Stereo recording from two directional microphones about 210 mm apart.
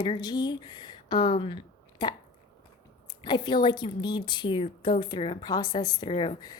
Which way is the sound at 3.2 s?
20° left (ahead or behind).